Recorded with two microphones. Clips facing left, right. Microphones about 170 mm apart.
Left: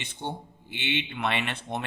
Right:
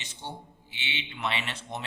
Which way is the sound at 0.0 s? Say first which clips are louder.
Left 6 dB; 60° left (ahead or behind).